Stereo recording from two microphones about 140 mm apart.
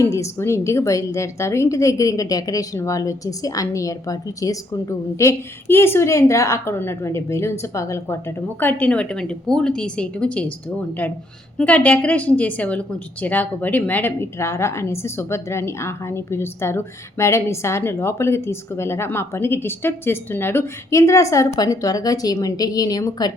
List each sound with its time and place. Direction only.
0.1 s a woman's voice: 20° left (ahead or behind)